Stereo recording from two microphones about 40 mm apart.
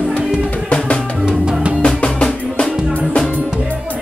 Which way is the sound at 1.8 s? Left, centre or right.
Left.